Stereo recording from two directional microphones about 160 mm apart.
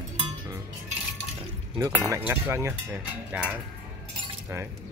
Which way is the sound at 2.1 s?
15° right (ahead or behind).